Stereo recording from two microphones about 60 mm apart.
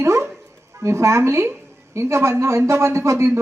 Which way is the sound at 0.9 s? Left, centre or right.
Right.